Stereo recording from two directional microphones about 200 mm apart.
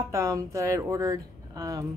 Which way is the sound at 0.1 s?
15° right (ahead or behind).